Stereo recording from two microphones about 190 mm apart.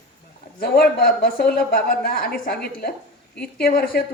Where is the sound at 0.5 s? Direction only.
55° left (ahead or behind).